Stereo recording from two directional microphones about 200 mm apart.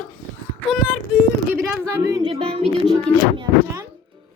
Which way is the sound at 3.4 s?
15° right (ahead or behind).